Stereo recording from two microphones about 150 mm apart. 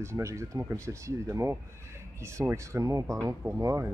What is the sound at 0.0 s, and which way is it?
Speech, 20° right (ahead or behind).